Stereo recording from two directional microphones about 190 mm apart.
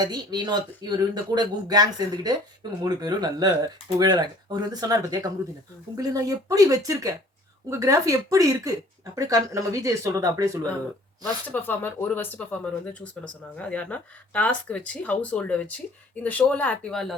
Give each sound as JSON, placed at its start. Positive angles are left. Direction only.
{"t": 0.0, "sound": "speech", "side_deg": -20}
{"t": 11.4, "sound": "speech", "side_deg": 10}